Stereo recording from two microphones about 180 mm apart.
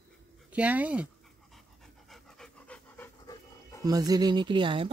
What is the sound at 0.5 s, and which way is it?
Speech, 10° right (ahead or behind).